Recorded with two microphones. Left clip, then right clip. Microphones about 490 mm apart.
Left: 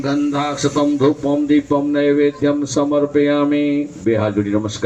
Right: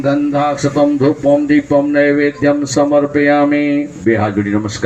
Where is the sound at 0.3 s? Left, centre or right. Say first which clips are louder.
Right 5 dB; left.